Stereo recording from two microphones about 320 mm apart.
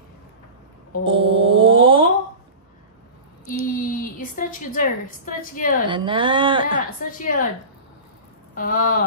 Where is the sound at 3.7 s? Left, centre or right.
Left.